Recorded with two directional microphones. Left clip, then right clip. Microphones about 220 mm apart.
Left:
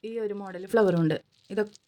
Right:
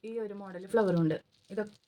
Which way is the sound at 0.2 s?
40° left (ahead or behind).